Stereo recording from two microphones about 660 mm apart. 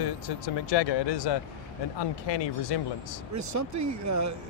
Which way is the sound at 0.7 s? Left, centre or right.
Left.